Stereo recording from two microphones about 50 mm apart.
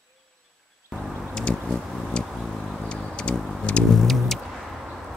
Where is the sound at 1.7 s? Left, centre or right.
Centre.